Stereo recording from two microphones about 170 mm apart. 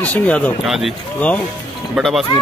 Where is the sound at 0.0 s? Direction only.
10° left (ahead or behind).